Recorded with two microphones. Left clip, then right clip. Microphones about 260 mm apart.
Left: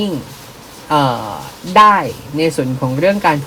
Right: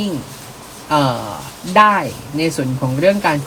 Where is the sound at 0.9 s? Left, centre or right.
Left.